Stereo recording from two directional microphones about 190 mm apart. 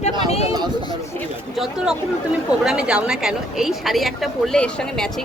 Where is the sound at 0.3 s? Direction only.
30° left (ahead or behind).